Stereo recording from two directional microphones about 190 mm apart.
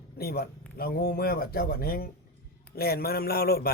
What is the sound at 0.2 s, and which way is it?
Speech, 55° left (ahead or behind).